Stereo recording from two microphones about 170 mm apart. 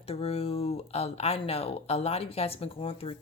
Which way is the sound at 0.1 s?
35° left (ahead or behind).